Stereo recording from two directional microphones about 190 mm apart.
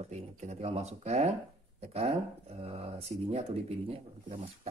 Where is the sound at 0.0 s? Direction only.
35° right (ahead or behind).